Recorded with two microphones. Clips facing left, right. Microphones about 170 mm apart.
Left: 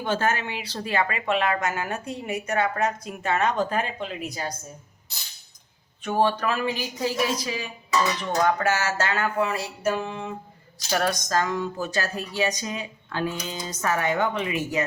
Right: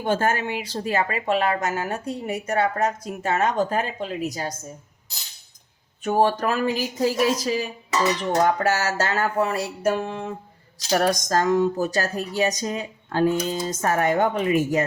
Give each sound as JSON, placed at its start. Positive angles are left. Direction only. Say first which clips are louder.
{"t": 0.0, "sound": "a woman's voice", "louder": "right 3 dB", "side_deg": -45}
{"t": 6.1, "sound": "a woman's voice", "louder": "right 3 dB", "side_deg": -40}
{"t": 10.8, "sound": "a woman's voice", "louder": "right 4 dB", "side_deg": -40}